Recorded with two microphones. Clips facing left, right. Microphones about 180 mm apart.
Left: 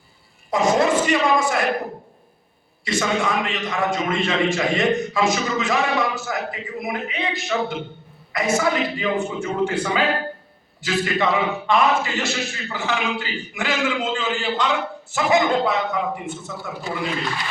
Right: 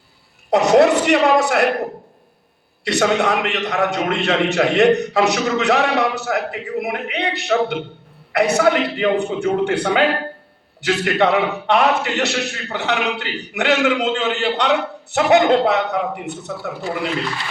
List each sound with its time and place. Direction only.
0.5 s a man's voice: 70° right (ahead or behind)
2.8 s a man's voice: 70° right (ahead or behind)